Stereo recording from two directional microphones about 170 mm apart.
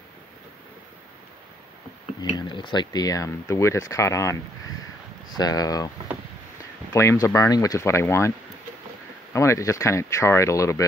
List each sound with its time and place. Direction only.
2.3 s speech: 25° left (ahead or behind)
5.4 s speech: 20° left (ahead or behind)
6.9 s speech: 15° left (ahead or behind)
9.3 s speech: 15° left (ahead or behind)